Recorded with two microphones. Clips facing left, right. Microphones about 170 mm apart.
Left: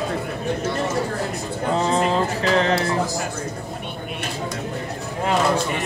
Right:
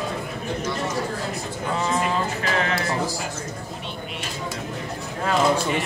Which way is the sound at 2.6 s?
30° left (ahead or behind).